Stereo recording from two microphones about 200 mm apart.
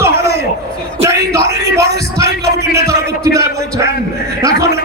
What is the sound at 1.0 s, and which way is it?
Bellow, 15° right (ahead or behind).